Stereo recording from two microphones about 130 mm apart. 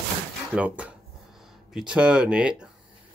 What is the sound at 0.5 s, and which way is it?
Speech, 10° right (ahead or behind).